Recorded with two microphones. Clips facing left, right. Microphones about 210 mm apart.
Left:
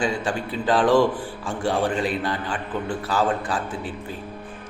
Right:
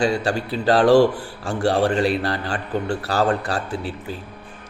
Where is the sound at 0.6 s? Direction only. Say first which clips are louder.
Right 4 dB; 70° right (ahead or behind).